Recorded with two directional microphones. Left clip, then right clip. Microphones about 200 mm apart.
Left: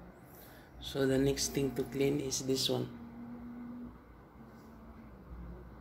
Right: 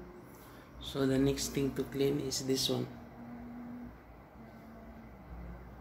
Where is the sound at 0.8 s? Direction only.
15° left (ahead or behind).